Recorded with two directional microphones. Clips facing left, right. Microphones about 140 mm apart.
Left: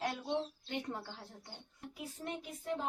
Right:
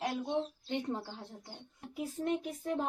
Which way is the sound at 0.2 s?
20° right (ahead or behind).